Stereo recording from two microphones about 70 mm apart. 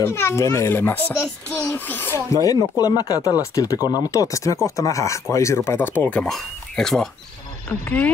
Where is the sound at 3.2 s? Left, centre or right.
Left.